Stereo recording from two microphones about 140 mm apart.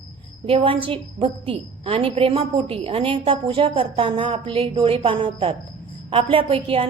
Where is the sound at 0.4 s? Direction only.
40° right (ahead or behind).